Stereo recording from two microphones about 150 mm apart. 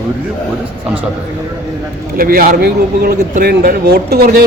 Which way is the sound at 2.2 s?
75° right (ahead or behind).